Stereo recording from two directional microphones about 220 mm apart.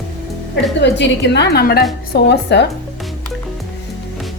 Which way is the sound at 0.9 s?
55° left (ahead or behind).